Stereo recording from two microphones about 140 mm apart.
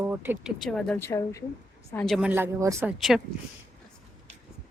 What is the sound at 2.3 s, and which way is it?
Speech, 15° right (ahead or behind).